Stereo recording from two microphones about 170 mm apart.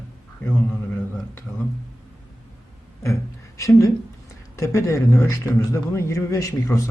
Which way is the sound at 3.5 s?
20° left (ahead or behind).